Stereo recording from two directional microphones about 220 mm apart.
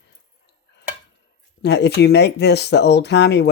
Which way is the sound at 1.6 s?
50° left (ahead or behind).